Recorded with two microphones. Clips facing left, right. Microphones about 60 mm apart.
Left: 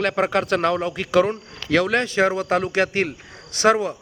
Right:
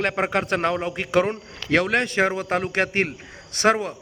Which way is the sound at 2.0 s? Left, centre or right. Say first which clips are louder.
Left 2 dB; right.